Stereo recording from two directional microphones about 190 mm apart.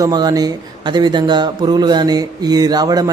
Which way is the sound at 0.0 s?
20° right (ahead or behind).